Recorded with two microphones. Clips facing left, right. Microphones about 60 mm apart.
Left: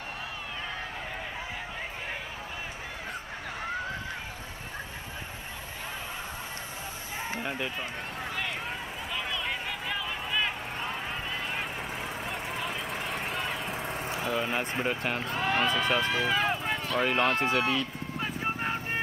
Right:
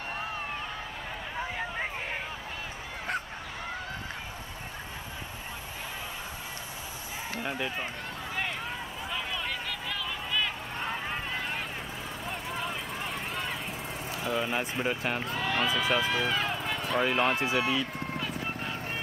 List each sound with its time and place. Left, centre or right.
7.4 s speech: centre
9.5 s vehicle: centre
12.3 s a sound: centre
14.2 s speech: centre
15.3 s speech: centre
15.6 s speech: centre
16.4 s a sound: left
16.8 s speech: centre
18.2 s vehicle: left